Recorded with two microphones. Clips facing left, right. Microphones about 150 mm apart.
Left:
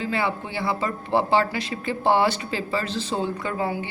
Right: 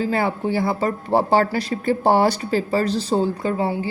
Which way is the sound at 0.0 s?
45° right (ahead or behind).